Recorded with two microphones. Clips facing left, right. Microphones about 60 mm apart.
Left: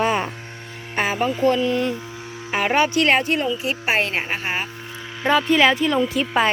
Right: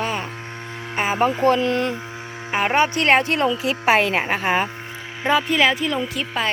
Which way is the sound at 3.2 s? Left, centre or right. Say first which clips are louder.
Right 2 dB; right.